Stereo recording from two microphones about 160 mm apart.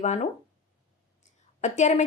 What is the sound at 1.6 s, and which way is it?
Speech, 50° left (ahead or behind).